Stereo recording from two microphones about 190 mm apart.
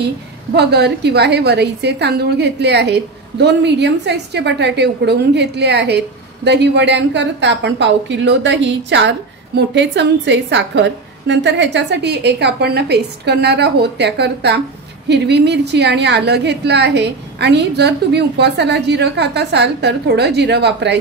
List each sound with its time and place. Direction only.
0.6 s a woman's voice: 60° right (ahead or behind)